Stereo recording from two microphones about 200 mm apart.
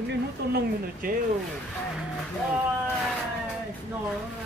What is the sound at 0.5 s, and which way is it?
Speech, 55° right (ahead or behind).